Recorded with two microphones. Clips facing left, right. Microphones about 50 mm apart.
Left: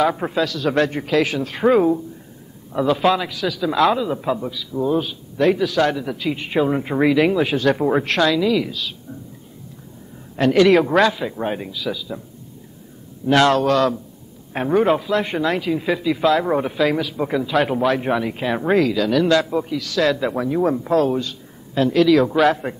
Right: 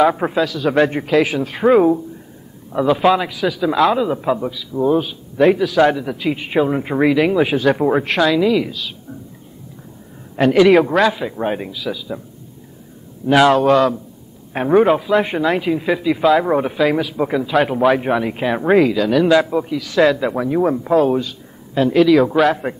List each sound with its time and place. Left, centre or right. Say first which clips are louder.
0.0 s a man's voice: right 4 dB; centre
10.3 s a man's voice: right 3 dB; centre
13.3 s a man's voice: right 3 dB; centre